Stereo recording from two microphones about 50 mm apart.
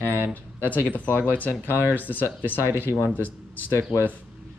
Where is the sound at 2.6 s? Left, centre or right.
Right.